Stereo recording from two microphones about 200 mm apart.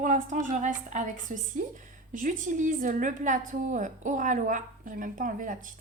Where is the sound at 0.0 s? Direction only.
40° right (ahead or behind).